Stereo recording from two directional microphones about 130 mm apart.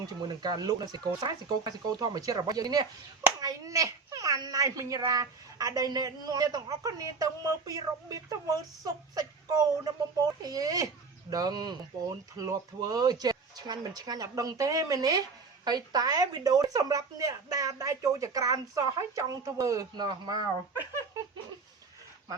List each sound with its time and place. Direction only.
0.0 s a child's voice: 30° right (ahead or behind)